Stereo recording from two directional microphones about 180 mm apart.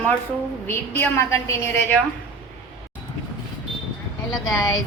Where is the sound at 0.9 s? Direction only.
15° left (ahead or behind).